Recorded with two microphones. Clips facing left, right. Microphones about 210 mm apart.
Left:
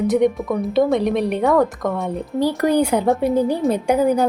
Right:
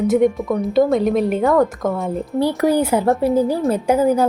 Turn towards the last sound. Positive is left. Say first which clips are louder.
# right 1 dB
turn(degrees=-5)  # may be behind; listen again after turning